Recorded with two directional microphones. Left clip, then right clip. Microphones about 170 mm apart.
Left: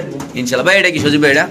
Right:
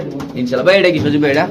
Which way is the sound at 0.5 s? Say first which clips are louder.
Right 1 dB; centre (ahead or behind).